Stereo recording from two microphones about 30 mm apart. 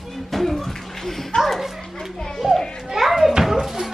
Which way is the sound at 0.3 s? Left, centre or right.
Centre.